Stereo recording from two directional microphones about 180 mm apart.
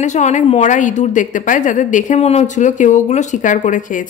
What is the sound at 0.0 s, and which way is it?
Speech, 40° left (ahead or behind).